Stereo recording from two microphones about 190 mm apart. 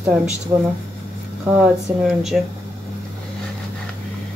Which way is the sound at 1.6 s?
Centre (ahead or behind).